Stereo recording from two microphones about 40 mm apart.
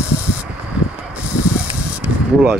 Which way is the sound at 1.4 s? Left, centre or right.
Right.